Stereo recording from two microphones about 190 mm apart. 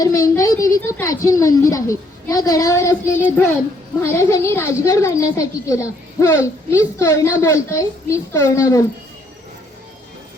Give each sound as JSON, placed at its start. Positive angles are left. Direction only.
{"t": 0.0, "sound": "a woman's voice", "side_deg": 15}